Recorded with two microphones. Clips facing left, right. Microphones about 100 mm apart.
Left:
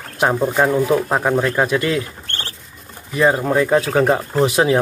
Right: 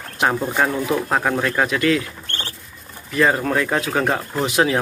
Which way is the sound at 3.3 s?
15° left (ahead or behind).